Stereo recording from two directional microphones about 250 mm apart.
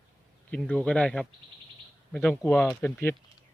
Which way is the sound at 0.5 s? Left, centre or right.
Centre.